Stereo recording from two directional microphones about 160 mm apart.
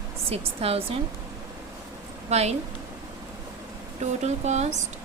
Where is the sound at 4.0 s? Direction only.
45° right (ahead or behind).